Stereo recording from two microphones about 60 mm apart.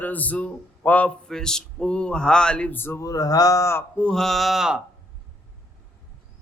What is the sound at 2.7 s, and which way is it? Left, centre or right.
Speech, left.